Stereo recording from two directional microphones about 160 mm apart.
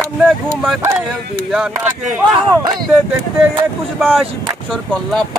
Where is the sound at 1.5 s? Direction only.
5° right (ahead or behind).